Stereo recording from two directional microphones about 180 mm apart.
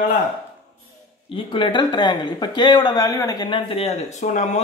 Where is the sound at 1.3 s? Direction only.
30° left (ahead or behind).